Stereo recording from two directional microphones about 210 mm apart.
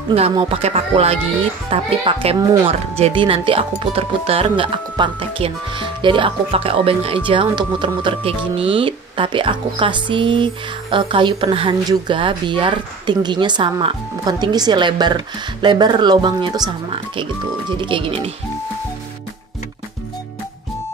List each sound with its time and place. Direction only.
0.1 s speech: 25° right (ahead or behind)